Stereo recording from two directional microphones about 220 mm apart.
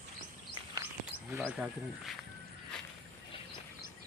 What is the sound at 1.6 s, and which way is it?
Speech, 5° right (ahead or behind).